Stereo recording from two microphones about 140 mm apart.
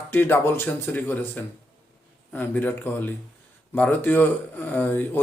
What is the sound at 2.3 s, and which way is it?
A man's voice, 15° left (ahead or behind).